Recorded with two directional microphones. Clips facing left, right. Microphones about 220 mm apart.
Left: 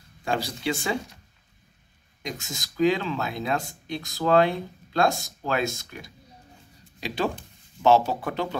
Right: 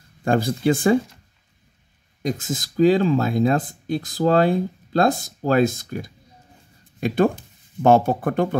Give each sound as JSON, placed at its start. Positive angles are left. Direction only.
{"t": 0.2, "sound": "speech", "side_deg": -50}
{"t": 2.2, "sound": "speech", "side_deg": -50}